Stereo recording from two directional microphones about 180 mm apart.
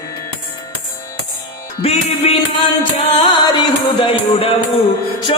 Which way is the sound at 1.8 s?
35° left (ahead or behind).